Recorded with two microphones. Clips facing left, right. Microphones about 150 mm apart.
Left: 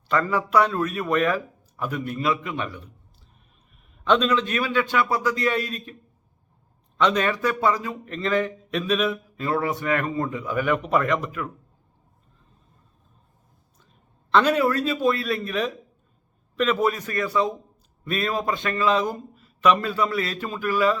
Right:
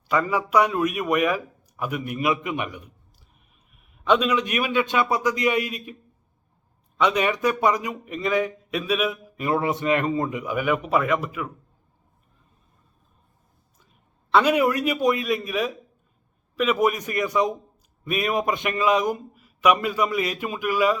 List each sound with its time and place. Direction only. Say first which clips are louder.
0.1 s a man's voice: even; 10° right (ahead or behind)
4.0 s a man's voice: even; 10° right (ahead or behind)
14.3 s a man's voice: right 1 dB; 10° right (ahead or behind)